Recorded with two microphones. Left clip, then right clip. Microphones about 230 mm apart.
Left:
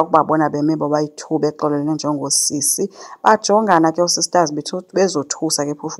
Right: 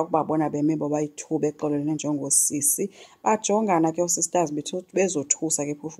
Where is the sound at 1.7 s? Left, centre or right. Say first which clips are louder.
Left 7 dB; centre.